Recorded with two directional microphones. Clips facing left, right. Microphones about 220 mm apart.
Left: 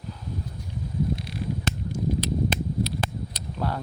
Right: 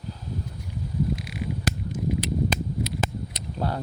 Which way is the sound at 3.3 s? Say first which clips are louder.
Right 1 dB; 30° right (ahead or behind).